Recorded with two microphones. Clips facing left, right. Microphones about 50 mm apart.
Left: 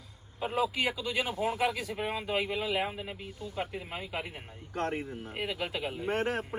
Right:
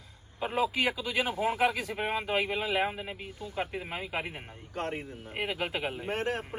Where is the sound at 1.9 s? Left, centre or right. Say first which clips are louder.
Right 2 dB; right.